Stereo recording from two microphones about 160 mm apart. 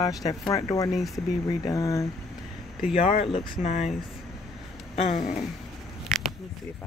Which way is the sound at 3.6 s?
45° left (ahead or behind).